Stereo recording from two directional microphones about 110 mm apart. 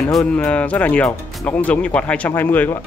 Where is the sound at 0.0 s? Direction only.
10° left (ahead or behind).